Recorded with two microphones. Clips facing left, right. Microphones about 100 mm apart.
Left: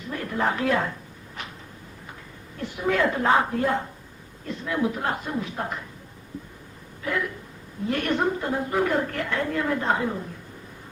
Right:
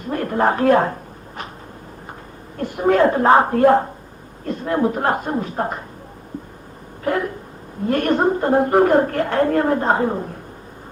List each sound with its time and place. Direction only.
0.0 s a woman's voice: 50° right (ahead or behind)
2.6 s a woman's voice: 50° right (ahead or behind)
7.0 s a sound: 45° right (ahead or behind)
7.9 s a woman's voice: 45° right (ahead or behind)